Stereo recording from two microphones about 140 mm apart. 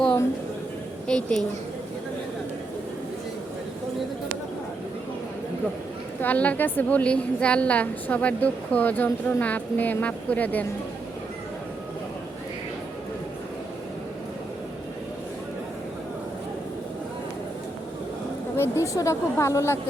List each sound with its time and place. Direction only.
1.0 s a woman's voice: 5° left (ahead or behind)
6.2 s a woman's voice: 10° left (ahead or behind)
18.5 s a woman's voice: 20° left (ahead or behind)